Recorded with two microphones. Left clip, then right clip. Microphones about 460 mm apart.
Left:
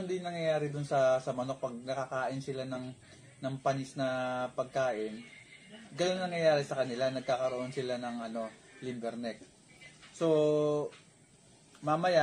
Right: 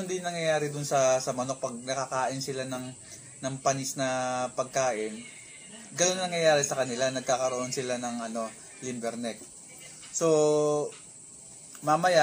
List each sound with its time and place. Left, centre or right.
0.1 s speech: left
5.9 s speech: left
10.1 s speech: left